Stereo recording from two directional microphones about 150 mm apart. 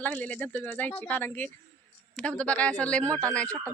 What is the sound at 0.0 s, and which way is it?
Speech, 10° left (ahead or behind).